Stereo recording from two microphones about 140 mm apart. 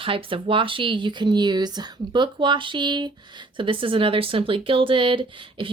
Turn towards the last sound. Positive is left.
turn(degrees=-40)  # may be behind; listen again after turning